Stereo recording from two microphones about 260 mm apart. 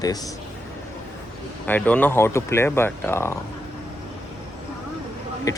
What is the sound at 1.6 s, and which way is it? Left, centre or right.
Speech, centre.